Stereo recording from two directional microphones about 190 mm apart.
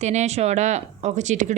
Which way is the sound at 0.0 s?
35° right (ahead or behind).